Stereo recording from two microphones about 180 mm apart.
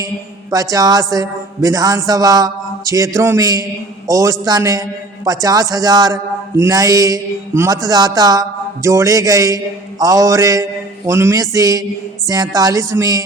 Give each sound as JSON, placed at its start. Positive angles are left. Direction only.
{"t": 0.5, "sound": "a man's voice", "side_deg": -20}